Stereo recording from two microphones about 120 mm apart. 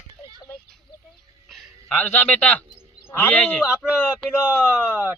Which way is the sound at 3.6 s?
10° right (ahead or behind).